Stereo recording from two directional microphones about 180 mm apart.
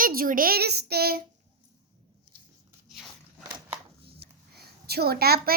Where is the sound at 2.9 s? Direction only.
Centre (ahead or behind).